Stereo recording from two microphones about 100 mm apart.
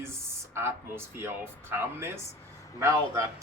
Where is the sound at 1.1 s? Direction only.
25° right (ahead or behind).